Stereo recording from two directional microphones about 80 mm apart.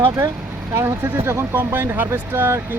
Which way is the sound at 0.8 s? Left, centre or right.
Right.